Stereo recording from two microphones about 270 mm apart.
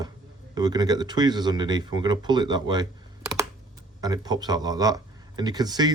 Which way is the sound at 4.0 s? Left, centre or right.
Centre.